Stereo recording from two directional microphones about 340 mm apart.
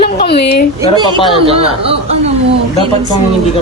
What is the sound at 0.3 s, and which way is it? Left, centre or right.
Speech, left.